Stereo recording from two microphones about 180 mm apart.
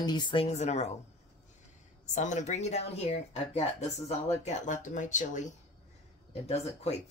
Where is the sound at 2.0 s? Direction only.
40° left (ahead or behind).